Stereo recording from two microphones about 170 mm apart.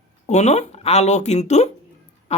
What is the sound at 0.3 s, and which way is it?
Speech, 40° left (ahead or behind).